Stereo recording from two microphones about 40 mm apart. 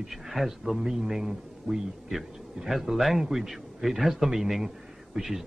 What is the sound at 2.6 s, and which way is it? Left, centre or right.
Speech, centre.